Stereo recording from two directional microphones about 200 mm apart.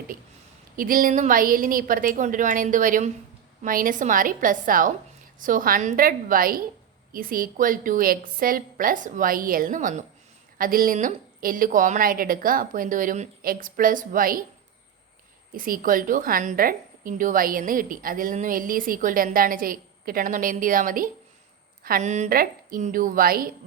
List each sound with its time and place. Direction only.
0.8 s a woman's voice: 45° right (ahead or behind)
15.5 s a woman's voice: 45° right (ahead or behind)